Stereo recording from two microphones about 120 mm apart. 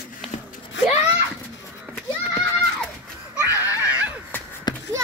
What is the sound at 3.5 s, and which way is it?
Screaming, 15° right (ahead or behind).